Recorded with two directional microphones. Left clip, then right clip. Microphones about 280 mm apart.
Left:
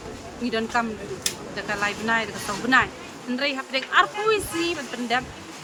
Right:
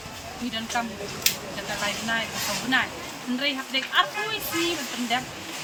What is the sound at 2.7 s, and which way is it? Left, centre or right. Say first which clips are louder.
A woman's voice: left 6 dB; centre.